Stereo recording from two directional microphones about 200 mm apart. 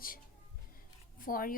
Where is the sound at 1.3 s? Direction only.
45° left (ahead or behind).